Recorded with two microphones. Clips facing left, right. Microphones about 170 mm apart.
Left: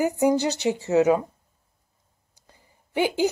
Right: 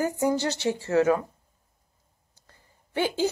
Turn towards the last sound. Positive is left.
turn(degrees=15)  # may be behind; listen again after turning